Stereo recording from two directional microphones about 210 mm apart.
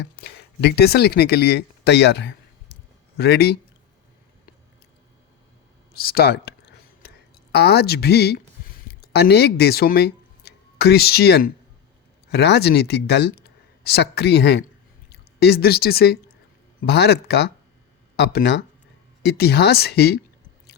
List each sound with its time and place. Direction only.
0.0 s speech: 55° left (ahead or behind)
5.9 s speech: 45° left (ahead or behind)
7.5 s a woman's voice: 50° left (ahead or behind)